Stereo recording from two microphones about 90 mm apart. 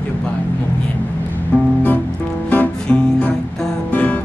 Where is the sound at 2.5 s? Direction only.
15° left (ahead or behind).